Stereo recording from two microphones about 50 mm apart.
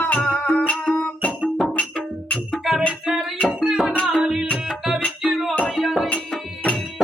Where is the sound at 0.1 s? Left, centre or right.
Left.